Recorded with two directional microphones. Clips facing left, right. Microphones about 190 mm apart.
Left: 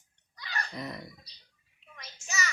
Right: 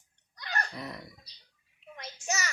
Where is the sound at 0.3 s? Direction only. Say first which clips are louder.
Right 4 dB; 55° right (ahead or behind).